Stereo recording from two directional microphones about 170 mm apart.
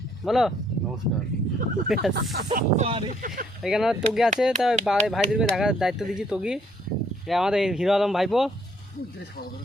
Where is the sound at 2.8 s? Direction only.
35° right (ahead or behind).